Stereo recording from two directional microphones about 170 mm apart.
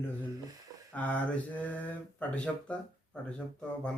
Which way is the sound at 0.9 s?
10° left (ahead or behind).